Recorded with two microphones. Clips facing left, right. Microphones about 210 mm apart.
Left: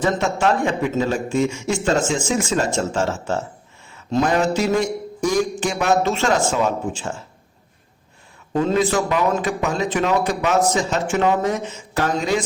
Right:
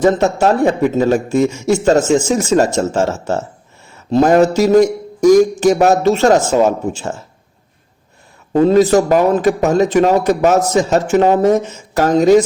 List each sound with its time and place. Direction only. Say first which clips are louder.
0.0 s a man's voice: right 7 dB; 40° right (ahead or behind)
8.5 s a man's voice: right 9 dB; 40° right (ahead or behind)